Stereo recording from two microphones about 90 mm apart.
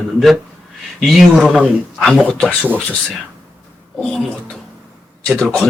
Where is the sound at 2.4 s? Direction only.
15° right (ahead or behind).